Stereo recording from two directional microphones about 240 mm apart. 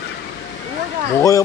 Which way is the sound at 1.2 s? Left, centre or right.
Centre.